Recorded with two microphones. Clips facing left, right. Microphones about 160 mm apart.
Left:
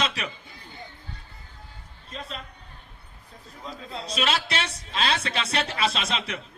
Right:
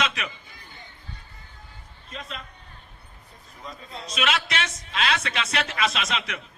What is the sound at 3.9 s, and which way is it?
A man's voice, 35° left (ahead or behind).